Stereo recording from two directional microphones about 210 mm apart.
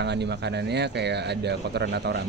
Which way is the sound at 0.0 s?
55° right (ahead or behind).